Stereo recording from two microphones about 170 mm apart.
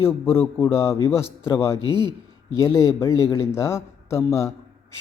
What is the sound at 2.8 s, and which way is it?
Speech, 15° left (ahead or behind).